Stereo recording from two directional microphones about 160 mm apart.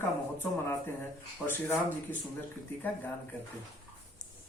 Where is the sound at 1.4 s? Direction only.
15° left (ahead or behind).